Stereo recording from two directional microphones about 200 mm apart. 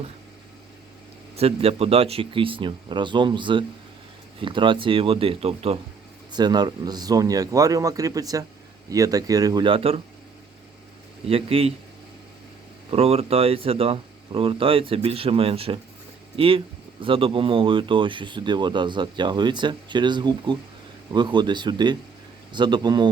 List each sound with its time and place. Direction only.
1.4 s speech: 30° right (ahead or behind)
11.3 s speech: 30° right (ahead or behind)
12.9 s speech: 30° right (ahead or behind)
17.0 s speech: 25° right (ahead or behind)